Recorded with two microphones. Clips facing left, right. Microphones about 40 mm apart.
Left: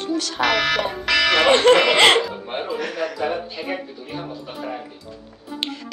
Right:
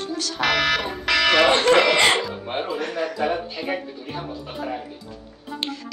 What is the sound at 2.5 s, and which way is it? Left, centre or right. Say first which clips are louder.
Speech: even; centre.